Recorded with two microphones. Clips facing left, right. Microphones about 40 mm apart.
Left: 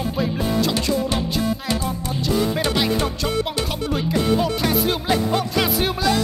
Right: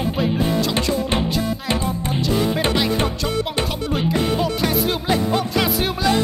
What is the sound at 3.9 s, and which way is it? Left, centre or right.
Music, centre.